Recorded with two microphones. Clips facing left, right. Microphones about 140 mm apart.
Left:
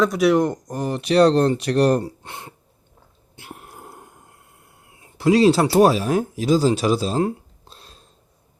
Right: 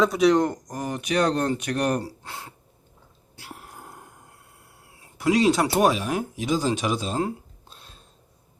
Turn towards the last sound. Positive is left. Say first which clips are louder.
# left 2 dB
turn(degrees=35)  # may be behind; listen again after turning